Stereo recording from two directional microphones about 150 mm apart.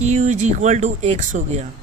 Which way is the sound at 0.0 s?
55° right (ahead or behind).